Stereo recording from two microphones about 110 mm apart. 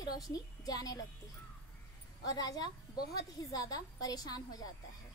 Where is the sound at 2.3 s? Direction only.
35° left (ahead or behind).